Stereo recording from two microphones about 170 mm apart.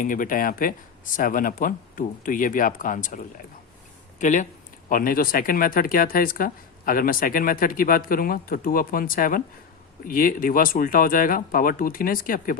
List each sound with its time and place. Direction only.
0.0 s speech: 50° left (ahead or behind)